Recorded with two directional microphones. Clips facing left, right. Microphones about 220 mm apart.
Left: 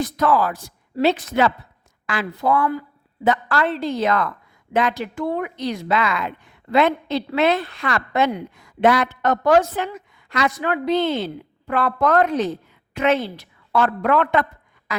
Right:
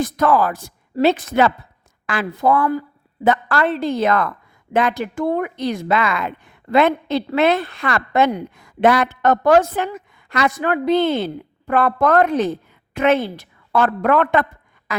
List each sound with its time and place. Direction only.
0.0 s a woman's voice: 50° right (ahead or behind)